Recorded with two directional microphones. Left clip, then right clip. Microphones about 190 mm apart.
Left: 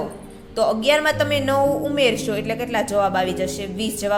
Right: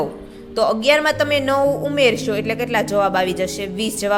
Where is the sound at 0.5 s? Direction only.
25° right (ahead or behind).